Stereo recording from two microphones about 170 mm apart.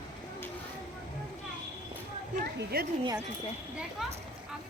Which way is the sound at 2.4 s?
65° right (ahead or behind).